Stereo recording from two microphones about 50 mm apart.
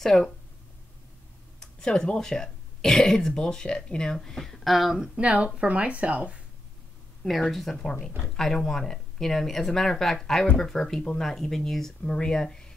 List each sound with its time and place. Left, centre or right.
0.0 s speech: centre
1.6 s a sound: centre
2.1 s speech: centre
5.1 s speech: right
7.2 s speech: centre